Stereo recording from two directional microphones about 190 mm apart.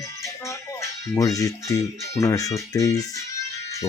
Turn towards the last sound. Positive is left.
turn(degrees=15)  # may be behind; listen again after turning